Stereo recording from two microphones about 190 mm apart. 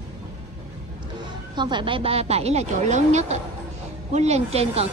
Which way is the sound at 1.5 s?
25° right (ahead or behind).